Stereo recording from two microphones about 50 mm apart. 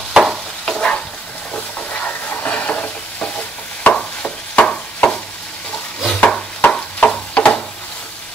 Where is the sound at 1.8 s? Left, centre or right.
Left.